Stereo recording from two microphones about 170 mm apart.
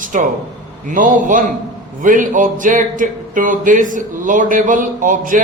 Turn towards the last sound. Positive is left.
turn(degrees=-50)  # may be behind; listen again after turning